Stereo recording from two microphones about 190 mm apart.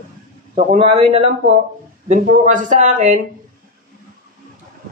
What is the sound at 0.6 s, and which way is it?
Speech, 35° right (ahead or behind).